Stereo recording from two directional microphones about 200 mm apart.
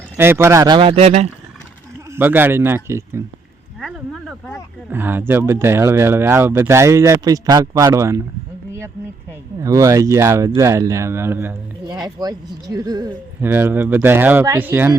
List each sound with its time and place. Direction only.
0.2 s speech: 10° right (ahead or behind); by 1.3 s 35° right (ahead or behind)
2.1 s speech: 10° right (ahead or behind)
3.8 s speech: centre (ahead or behind)
9.6 s speech: 15° right (ahead or behind)